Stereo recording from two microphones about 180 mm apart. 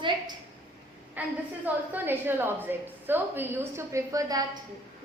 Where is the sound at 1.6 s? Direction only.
10° right (ahead or behind).